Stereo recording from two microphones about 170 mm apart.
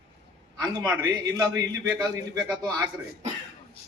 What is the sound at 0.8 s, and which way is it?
A man's voice, 20° right (ahead or behind).